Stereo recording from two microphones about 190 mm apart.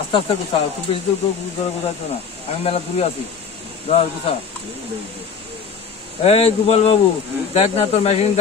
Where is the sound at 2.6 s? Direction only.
30° left (ahead or behind).